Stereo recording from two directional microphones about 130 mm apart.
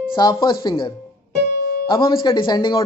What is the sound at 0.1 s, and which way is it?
Speech, 35° left (ahead or behind).